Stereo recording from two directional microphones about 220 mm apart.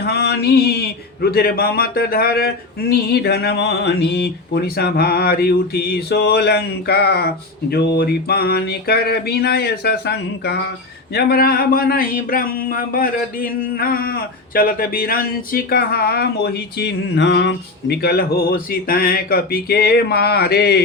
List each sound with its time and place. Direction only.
0.0 s speech: 45° left (ahead or behind)